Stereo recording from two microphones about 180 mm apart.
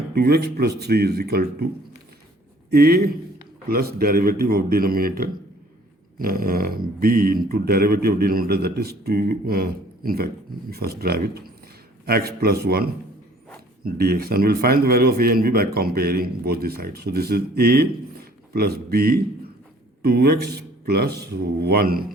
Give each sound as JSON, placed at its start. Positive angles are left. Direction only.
{"t": 0.1, "sound": "a man's voice", "side_deg": -60}